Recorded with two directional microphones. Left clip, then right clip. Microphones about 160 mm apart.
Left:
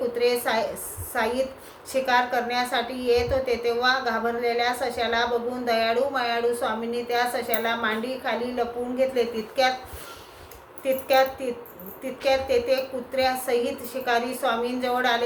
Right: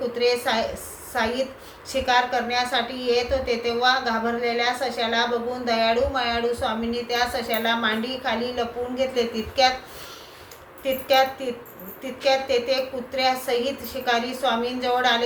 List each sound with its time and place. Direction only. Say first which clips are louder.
0.2 s a woman's voice: right 2 dB; 25° left (ahead or behind)
10.8 s a woman's voice: right 1 dB; 25° left (ahead or behind)